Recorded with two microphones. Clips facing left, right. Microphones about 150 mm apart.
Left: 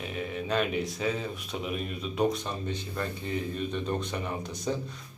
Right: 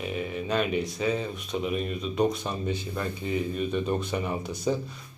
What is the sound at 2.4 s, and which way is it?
Speech, 10° right (ahead or behind).